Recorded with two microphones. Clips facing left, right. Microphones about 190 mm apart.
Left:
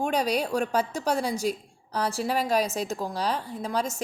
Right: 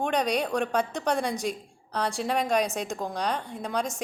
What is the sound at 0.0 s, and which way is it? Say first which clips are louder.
A woman's voice: even; 5° left (ahead or behind).